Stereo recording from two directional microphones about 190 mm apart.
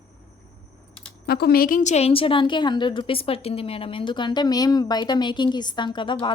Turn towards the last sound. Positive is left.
turn(degrees=25)  # may be behind; listen again after turning